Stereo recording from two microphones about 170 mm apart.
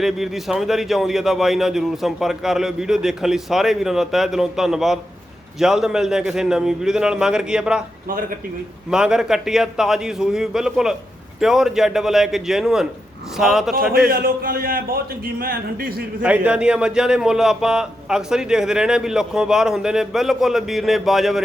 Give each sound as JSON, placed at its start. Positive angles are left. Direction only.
{"t": 0.0, "sound": "a man's voice", "side_deg": 0}
{"t": 8.9, "sound": "a man's voice", "side_deg": -5}
{"t": 14.1, "sound": "speech", "side_deg": -60}
{"t": 16.2, "sound": "a man's voice", "side_deg": -10}